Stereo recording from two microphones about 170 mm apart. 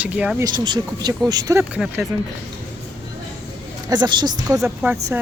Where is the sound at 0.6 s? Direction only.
25° right (ahead or behind).